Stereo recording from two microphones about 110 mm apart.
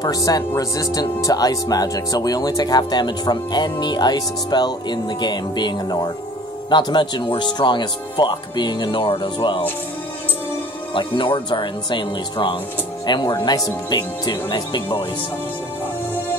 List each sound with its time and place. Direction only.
0.0 s speech: 35° left (ahead or behind)
10.9 s speech: 45° left (ahead or behind)